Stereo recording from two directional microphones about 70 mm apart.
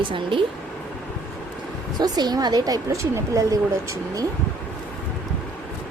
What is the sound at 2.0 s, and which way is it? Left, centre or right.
Speech, right.